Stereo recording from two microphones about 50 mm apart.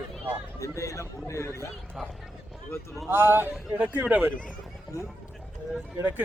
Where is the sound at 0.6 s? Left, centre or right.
Left.